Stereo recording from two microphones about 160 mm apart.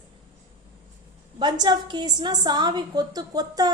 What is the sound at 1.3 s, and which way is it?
A woman's voice, 25° right (ahead or behind).